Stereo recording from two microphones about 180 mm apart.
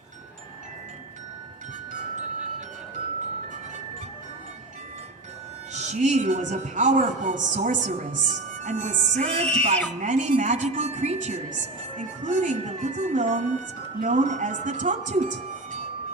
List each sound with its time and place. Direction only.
5.7 s speech: 40° right (ahead or behind)